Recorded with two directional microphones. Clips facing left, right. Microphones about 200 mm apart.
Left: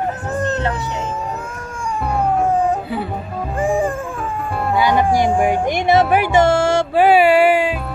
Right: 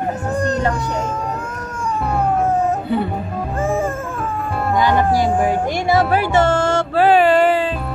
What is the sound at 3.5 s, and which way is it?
Music, 15° left (ahead or behind).